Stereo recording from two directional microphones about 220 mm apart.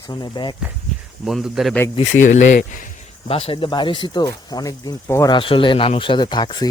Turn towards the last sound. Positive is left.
turn(degrees=20)  # may be behind; listen again after turning